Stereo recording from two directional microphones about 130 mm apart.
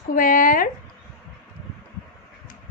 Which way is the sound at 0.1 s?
90° left.